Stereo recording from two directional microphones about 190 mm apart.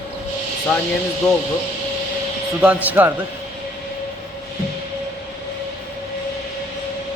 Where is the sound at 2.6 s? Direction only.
10° right (ahead or behind).